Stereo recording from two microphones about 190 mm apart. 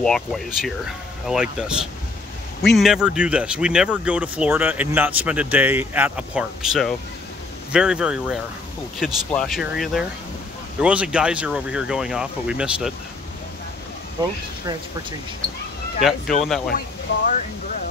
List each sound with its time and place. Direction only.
0.0 s speech: centre (ahead or behind)
14.2 s speech: 20° right (ahead or behind)
16.0 s speech: centre (ahead or behind)